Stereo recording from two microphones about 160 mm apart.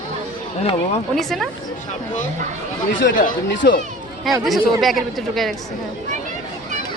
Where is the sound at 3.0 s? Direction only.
75° left (ahead or behind).